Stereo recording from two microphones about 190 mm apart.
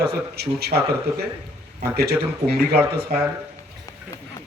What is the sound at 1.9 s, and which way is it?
Speech, 55° right (ahead or behind).